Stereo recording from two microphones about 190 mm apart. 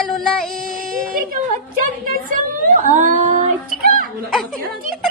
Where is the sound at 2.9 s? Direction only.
40° right (ahead or behind).